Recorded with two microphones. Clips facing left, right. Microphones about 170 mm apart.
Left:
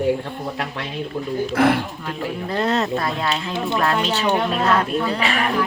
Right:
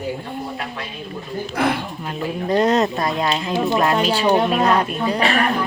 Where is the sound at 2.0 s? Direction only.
20° right (ahead or behind).